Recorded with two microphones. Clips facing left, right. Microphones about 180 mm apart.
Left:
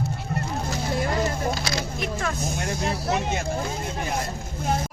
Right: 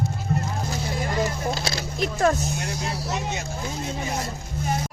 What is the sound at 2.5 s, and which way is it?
Speech, 50° left (ahead or behind).